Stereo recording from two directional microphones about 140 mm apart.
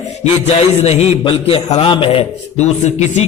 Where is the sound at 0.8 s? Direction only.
50° left (ahead or behind).